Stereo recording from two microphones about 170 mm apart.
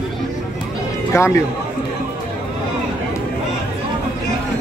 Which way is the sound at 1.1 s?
15° left (ahead or behind).